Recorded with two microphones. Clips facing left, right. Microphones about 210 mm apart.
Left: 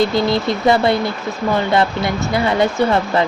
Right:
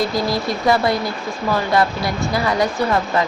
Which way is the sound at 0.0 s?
25° left (ahead or behind).